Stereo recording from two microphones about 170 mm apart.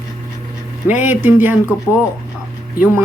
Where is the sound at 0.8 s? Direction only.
10° right (ahead or behind).